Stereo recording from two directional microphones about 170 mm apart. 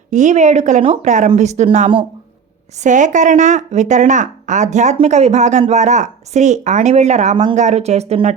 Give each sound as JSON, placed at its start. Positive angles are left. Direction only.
{"t": 0.1, "sound": "a woman's voice", "side_deg": -45}